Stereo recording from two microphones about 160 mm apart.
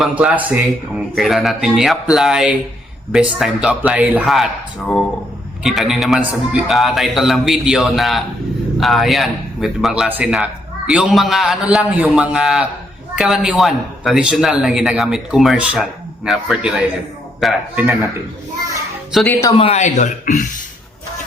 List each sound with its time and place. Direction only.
0.0 s a man's voice: 5° right (ahead or behind)
5.6 s a man's voice: centre (ahead or behind)
17.7 s speech: 15° right (ahead or behind)
19.1 s speech: 5° left (ahead or behind)
19.5 s speech: 40° left (ahead or behind)